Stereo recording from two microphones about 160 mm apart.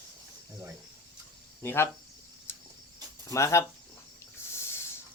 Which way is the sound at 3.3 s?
20° left (ahead or behind).